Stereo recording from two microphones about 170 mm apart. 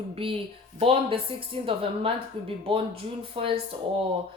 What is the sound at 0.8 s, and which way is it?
Speech, 35° right (ahead or behind).